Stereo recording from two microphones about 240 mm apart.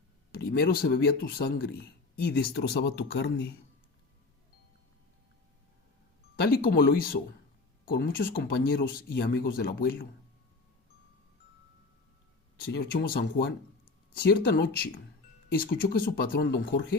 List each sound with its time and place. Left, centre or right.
0.3 s a man's voice: left
6.7 s a man's voice: left
12.6 s a man's voice: left